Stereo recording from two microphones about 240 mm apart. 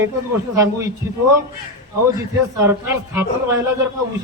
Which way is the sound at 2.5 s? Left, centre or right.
Centre.